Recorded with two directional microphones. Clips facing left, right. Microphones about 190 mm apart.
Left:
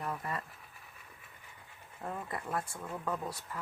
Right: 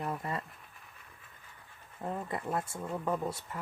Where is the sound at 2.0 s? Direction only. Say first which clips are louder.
Right 3 dB; 20° right (ahead or behind).